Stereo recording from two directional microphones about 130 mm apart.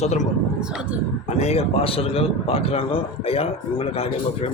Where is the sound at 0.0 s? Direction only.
65° left (ahead or behind).